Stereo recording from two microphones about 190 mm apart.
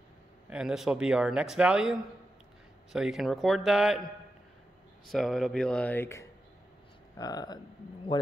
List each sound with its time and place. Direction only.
0.5 s speech: 5° right (ahead or behind)
5.0 s speech: centre (ahead or behind); by 8.3 s 25° left (ahead or behind)